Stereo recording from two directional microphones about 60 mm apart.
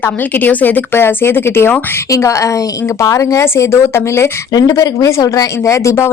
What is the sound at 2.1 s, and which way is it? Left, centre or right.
A woman's voice, left.